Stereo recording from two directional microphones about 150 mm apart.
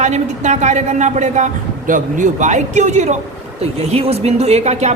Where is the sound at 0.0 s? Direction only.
50° right (ahead or behind).